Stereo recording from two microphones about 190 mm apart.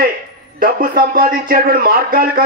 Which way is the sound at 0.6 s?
50° right (ahead or behind).